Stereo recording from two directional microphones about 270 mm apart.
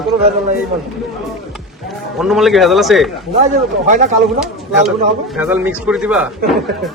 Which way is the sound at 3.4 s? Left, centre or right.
Right.